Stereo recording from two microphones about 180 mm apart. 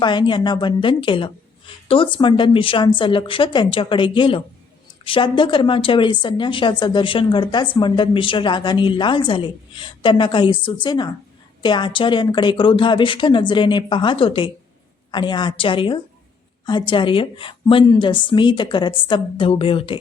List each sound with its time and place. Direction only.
0.0 s a woman's voice: 25° left (ahead or behind)